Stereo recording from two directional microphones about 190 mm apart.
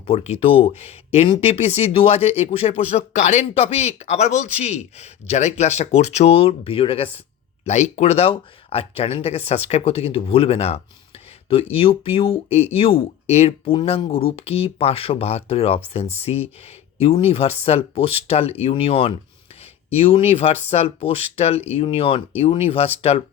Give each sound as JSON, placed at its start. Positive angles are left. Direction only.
{"t": 0.1, "sound": "speech", "side_deg": 30}